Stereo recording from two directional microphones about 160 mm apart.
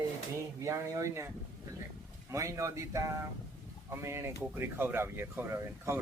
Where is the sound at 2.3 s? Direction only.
20° right (ahead or behind).